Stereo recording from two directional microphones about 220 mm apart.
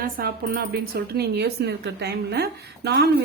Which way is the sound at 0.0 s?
40° right (ahead or behind).